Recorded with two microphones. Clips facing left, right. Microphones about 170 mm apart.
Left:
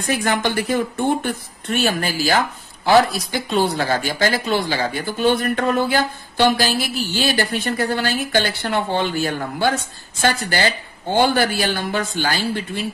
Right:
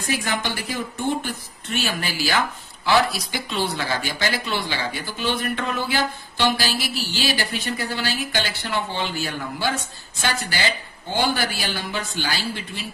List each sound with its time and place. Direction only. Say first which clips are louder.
0.0 s speech: left 5 dB; 55° left (ahead or behind)